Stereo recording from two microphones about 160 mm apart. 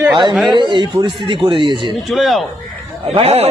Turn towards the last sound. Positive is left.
turn(degrees=-40)  # may be behind; listen again after turning